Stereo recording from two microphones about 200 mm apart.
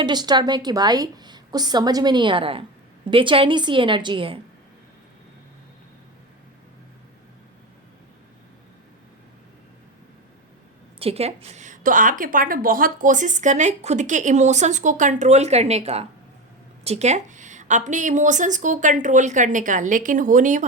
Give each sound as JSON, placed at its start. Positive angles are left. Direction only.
{"t": 0.0, "sound": "a woman's voice", "side_deg": -20}
{"t": 11.0, "sound": "a woman's voice", "side_deg": -30}